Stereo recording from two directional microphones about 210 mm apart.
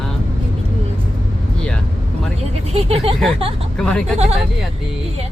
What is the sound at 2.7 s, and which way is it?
Vehicle, 30° right (ahead or behind).